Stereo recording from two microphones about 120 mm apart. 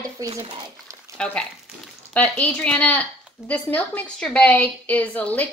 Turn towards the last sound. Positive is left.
turn(degrees=10)  # may be behind; listen again after turning